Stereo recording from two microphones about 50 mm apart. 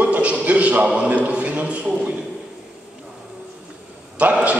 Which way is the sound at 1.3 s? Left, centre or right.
Right.